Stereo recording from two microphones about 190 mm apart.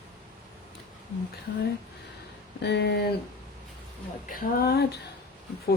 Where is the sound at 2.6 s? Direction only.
60° left (ahead or behind).